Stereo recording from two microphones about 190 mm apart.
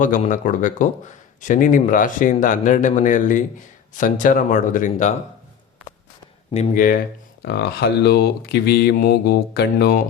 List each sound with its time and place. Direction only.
0.0 s speech: 45° left (ahead or behind)
6.5 s speech: 35° left (ahead or behind)
7.4 s speech: 55° left (ahead or behind)